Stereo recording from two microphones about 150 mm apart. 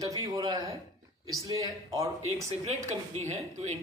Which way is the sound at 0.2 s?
25° right (ahead or behind).